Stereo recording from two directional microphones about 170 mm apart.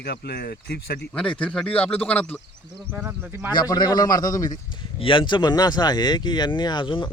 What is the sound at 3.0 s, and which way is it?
Speech, 10° right (ahead or behind).